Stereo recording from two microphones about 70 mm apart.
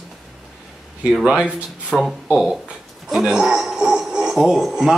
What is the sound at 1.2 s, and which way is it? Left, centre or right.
A man's voice, centre.